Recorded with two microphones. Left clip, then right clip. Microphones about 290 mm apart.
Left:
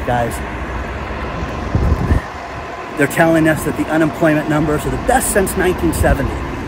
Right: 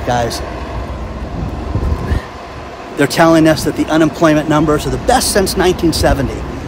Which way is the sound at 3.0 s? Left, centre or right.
Centre.